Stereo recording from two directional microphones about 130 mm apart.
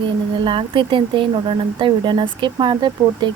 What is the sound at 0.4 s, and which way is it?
Speech, 40° right (ahead or behind).